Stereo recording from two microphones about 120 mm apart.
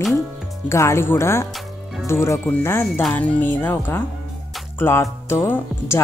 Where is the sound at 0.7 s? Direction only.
25° left (ahead or behind).